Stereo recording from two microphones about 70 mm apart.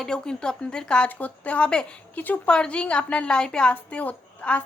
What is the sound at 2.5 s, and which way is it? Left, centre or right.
A woman's voice, centre.